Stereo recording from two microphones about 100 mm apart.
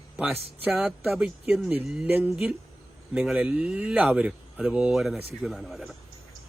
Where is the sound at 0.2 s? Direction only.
15° right (ahead or behind).